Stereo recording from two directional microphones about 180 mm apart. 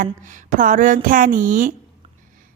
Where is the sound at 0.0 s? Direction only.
45° right (ahead or behind).